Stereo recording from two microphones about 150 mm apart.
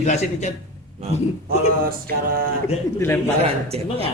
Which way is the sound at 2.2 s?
80° right.